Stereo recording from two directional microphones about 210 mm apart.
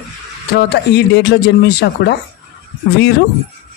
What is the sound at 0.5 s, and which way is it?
Speech, 50° left (ahead or behind).